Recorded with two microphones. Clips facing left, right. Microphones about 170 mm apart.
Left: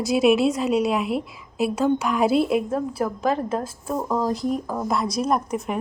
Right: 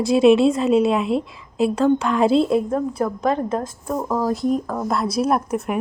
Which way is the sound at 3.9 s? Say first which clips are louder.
Right 2 dB; 5° right (ahead or behind).